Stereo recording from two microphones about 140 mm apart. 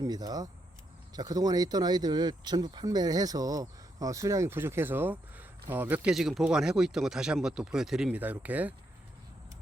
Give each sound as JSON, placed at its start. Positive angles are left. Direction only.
{"t": 0.0, "sound": "speech", "side_deg": -25}